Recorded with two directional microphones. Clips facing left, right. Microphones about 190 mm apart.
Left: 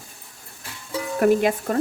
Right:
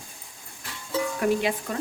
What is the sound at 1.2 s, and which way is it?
Speech, 50° left (ahead or behind).